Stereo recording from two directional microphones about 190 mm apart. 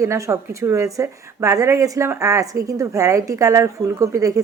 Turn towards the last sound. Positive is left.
turn(degrees=-15)  # may be behind; listen again after turning